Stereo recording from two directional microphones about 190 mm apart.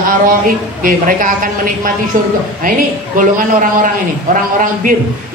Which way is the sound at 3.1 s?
45° right (ahead or behind).